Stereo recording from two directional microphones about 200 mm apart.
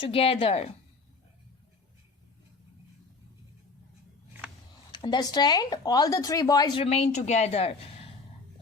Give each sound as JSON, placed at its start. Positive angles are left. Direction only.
{"t": 0.0, "sound": "speech", "side_deg": 30}
{"t": 4.9, "sound": "speech", "side_deg": 20}